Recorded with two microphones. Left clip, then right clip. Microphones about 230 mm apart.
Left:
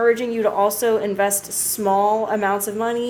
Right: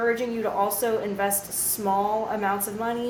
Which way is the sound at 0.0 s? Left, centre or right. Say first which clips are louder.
Left 7 dB; left.